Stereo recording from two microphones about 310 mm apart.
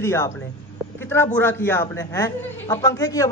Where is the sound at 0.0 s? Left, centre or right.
Centre.